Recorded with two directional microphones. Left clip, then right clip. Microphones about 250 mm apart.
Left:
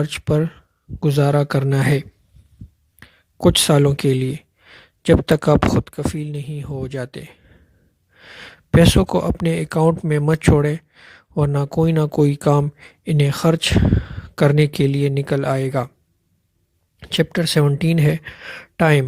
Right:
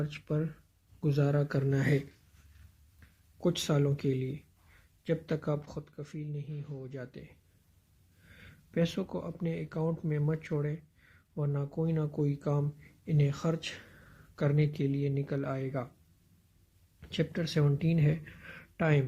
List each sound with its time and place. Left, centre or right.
0.0 s speech: left
17.0 s speech: left